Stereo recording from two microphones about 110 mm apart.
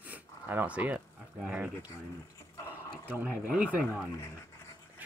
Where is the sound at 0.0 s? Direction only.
15° right (ahead or behind).